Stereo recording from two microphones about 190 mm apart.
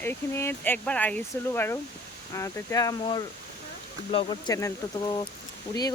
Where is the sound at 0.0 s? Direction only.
10° left (ahead or behind).